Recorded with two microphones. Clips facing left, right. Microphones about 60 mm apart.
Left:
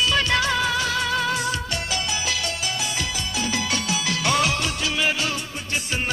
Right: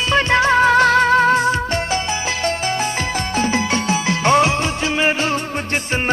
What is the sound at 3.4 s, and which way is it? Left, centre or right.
Music, right.